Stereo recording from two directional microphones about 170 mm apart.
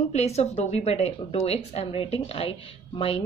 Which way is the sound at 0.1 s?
40° left (ahead or behind).